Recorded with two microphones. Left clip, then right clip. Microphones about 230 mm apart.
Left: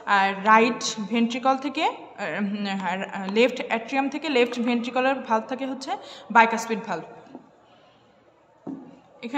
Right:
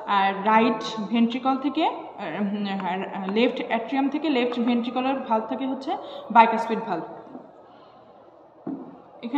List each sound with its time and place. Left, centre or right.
0.0 s a woman's voice: left
9.2 s speech: left